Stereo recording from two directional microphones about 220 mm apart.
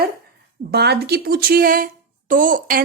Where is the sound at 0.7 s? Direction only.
45° right (ahead or behind).